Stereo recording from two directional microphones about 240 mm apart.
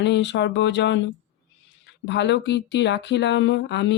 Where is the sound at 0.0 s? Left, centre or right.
Left.